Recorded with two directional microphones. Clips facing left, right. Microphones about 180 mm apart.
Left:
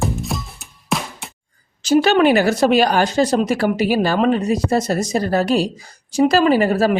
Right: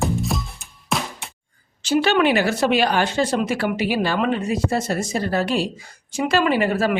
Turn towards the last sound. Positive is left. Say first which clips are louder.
# left 4 dB
turn(degrees=35)  # may be behind; listen again after turning